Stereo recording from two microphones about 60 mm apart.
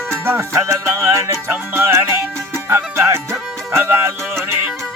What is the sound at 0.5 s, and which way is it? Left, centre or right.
Music, right.